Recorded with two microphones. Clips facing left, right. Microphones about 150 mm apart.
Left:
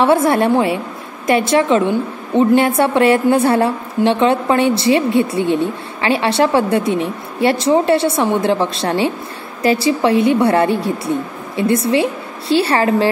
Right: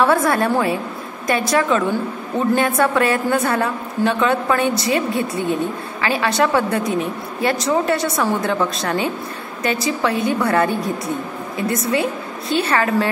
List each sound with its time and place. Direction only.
0.0 s a woman's voice: 25° left (ahead or behind)